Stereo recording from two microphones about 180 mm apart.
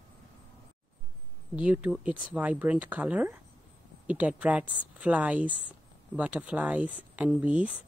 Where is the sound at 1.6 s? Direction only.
5° right (ahead or behind).